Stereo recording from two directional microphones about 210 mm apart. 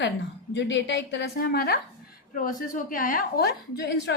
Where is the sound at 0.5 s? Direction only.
55° left (ahead or behind).